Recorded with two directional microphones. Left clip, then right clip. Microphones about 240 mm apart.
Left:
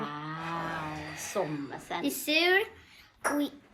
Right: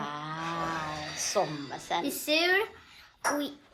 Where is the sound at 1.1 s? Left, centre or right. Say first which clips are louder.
Right 4 dB; centre.